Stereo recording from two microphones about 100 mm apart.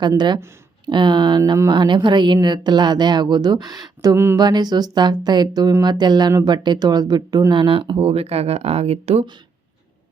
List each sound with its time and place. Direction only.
0.9 s speech: 50° right (ahead or behind)
4.1 s a sound: 25° right (ahead or behind)
4.4 s speech: 45° right (ahead or behind)
7.5 s speech: 55° right (ahead or behind); by 9.2 s 90° right